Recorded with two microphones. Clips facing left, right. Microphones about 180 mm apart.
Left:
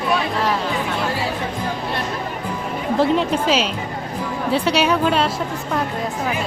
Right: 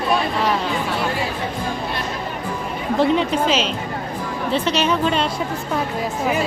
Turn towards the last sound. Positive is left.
turn(degrees=5)  # may be behind; listen again after turning